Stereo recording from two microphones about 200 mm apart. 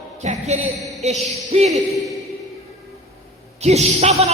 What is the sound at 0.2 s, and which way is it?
A man's voice, 35° right (ahead or behind).